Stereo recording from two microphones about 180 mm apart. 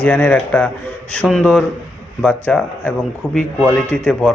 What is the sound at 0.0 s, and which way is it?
Speech, 5° left (ahead or behind).